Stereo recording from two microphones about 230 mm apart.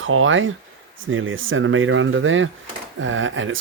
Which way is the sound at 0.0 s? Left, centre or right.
Right.